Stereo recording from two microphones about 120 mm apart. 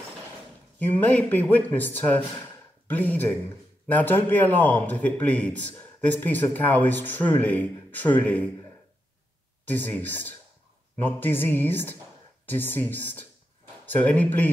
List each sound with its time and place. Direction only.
0.7 s speech: 15° left (ahead or behind)
9.7 s speech: 15° left (ahead or behind)